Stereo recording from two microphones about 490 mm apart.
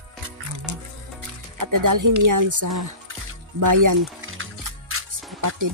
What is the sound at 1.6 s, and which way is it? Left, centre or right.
Speech, right.